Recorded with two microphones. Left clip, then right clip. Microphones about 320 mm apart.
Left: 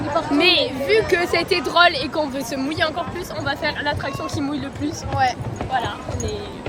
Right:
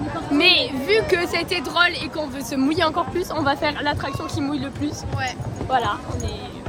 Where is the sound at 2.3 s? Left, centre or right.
Centre.